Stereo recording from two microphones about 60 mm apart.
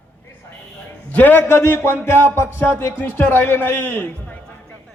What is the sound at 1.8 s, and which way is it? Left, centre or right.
Speech, left.